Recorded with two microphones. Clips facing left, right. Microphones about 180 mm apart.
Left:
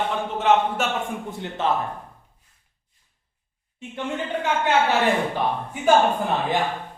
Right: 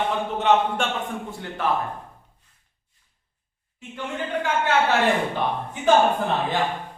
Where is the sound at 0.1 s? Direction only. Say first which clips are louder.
Left 1 dB; centre (ahead or behind).